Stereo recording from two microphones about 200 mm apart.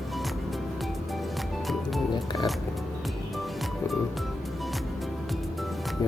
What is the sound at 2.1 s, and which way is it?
Music, 20° left (ahead or behind).